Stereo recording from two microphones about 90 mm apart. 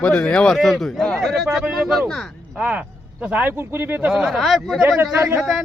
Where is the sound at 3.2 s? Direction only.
20° right (ahead or behind).